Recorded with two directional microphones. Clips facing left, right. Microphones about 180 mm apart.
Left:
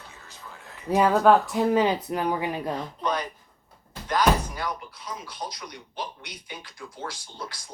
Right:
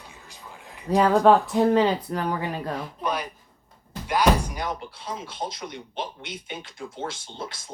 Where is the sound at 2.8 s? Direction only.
10° right (ahead or behind).